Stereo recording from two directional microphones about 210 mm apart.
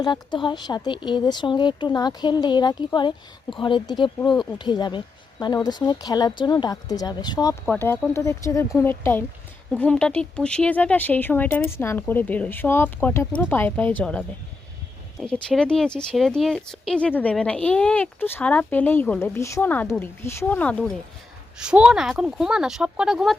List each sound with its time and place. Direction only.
0.0 s speech: 20° left (ahead or behind); by 20.9 s 5° left (ahead or behind)
21.6 s speech: 5° right (ahead or behind)